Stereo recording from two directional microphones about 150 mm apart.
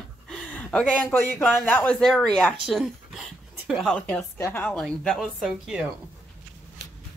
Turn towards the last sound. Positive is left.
turn(degrees=-5)  # may be behind; listen again after turning